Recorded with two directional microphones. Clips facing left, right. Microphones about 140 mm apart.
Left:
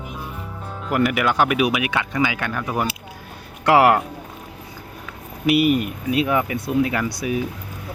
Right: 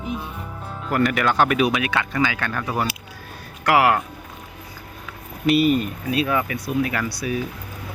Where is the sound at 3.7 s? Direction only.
25° left (ahead or behind).